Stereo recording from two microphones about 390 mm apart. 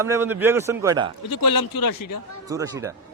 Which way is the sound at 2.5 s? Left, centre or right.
Centre.